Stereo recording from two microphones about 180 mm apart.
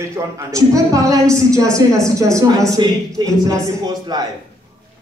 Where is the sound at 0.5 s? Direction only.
20° right (ahead or behind).